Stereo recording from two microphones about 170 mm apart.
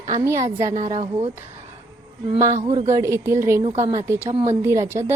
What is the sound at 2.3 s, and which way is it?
Speech, 20° right (ahead or behind).